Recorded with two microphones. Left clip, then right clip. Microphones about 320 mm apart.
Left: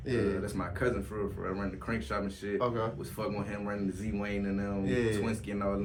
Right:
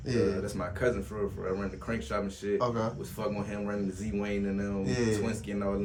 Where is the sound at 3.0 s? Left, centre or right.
Centre.